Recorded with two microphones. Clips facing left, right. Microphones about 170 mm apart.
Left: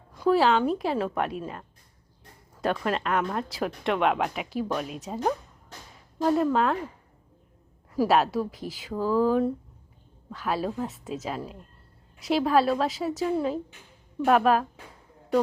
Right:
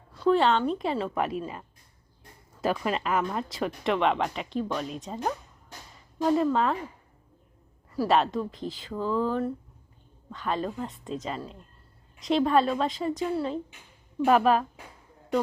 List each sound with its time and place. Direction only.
0.1 s speech: 10° left (ahead or behind)
8.0 s speech: 5° left (ahead or behind)